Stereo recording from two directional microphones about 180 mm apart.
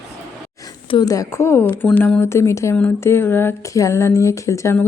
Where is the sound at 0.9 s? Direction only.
25° left (ahead or behind).